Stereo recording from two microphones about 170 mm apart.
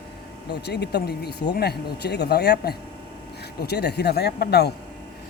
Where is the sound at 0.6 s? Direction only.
75° left (ahead or behind).